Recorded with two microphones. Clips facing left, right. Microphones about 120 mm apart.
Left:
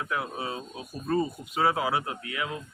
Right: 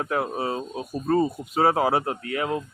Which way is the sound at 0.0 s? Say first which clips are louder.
Right 6 dB; 40° right (ahead or behind).